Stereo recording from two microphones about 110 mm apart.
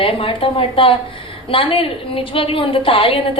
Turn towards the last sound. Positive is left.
turn(degrees=55)  # may be behind; listen again after turning